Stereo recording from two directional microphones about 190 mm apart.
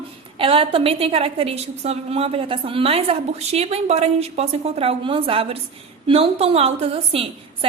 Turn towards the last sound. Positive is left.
turn(degrees=-30)  # may be behind; listen again after turning